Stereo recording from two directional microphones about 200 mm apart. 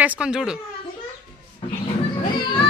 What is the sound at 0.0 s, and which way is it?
Speech, 5° right (ahead or behind).